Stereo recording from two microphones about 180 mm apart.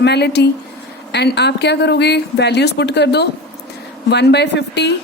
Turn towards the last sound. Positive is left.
turn(degrees=70)  # may be behind; listen again after turning